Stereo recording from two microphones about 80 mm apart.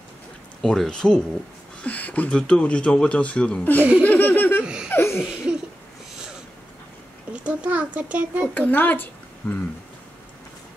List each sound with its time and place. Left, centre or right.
0.6 s speech: centre
4.0 s laughter: left
5.1 s laughter: centre
7.4 s a child's voice: centre
8.5 s speech: left